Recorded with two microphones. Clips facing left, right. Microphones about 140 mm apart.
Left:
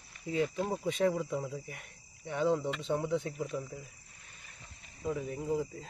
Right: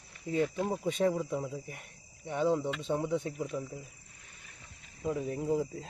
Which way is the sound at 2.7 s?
Centre (ahead or behind).